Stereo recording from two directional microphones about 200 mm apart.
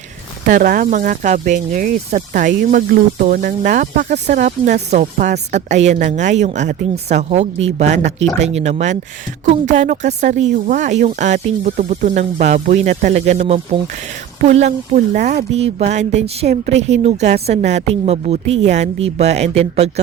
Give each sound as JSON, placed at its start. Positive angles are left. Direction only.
{"t": 0.4, "sound": "speech", "side_deg": -40}